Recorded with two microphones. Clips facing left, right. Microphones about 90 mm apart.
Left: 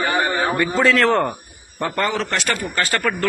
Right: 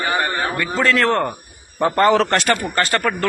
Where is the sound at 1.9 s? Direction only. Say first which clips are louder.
Right 7 dB; 40° right (ahead or behind).